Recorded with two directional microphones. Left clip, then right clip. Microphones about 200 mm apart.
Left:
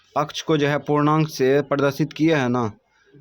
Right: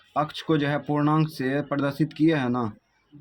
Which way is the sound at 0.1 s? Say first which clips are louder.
Left 3 dB; 30° left (ahead or behind).